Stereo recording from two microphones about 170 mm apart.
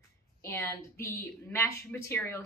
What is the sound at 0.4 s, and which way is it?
A woman's voice, 15° left (ahead or behind).